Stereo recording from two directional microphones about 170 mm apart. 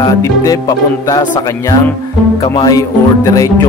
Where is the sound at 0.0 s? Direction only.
20° left (ahead or behind).